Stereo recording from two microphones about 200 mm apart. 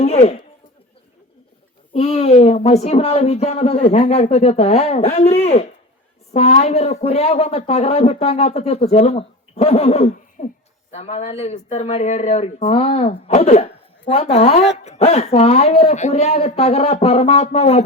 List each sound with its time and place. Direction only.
0.0 s a man's voice: 30° left (ahead or behind)
1.9 s speech: 30° left (ahead or behind)